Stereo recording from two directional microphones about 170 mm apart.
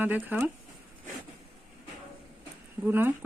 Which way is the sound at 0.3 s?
10° right (ahead or behind).